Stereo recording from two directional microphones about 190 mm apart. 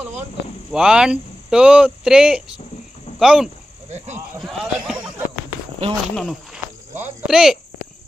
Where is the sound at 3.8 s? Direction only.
35° right (ahead or behind).